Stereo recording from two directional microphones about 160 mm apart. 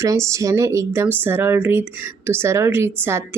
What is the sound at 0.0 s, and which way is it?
Speech, 20° right (ahead or behind).